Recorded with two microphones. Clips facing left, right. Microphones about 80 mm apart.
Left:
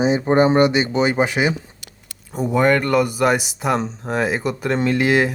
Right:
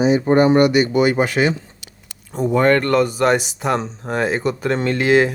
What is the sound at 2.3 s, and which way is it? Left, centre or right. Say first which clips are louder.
Speech: right 2 dB; centre.